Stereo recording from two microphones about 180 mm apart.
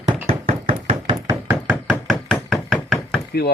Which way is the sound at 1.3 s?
10° right (ahead or behind).